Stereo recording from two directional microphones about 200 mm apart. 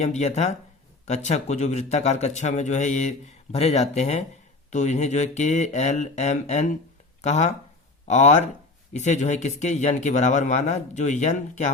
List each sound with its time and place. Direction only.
0.0 s speech: 35° left (ahead or behind)